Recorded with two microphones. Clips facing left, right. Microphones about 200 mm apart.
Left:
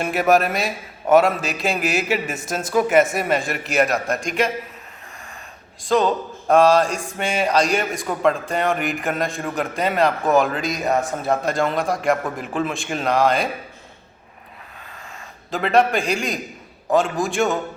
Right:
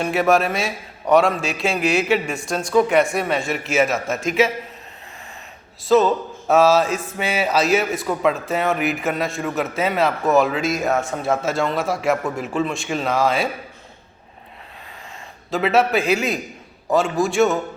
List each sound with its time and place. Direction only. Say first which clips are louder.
0.0 s a man's voice: even; centre (ahead or behind)
5.8 s a man's voice: right 3 dB; 5° right (ahead or behind)
15.4 s a man's voice: even; centre (ahead or behind)